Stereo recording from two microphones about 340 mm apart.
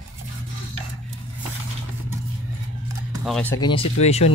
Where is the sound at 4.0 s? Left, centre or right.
Centre.